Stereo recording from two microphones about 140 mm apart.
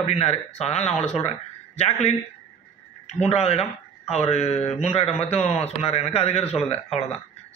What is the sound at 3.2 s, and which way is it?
A man's voice, 50° left (ahead or behind).